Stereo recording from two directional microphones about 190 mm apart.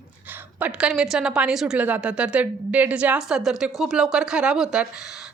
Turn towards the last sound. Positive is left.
turn(degrees=-5)  # may be behind; listen again after turning